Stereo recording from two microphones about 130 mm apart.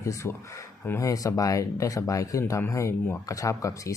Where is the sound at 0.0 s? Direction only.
20° left (ahead or behind).